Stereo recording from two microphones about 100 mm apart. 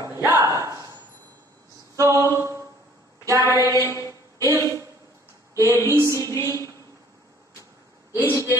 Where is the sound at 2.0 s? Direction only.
30° right (ahead or behind).